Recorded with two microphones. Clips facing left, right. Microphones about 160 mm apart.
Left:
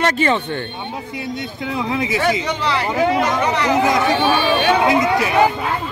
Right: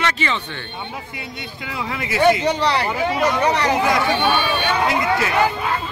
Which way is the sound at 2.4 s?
35° right (ahead or behind).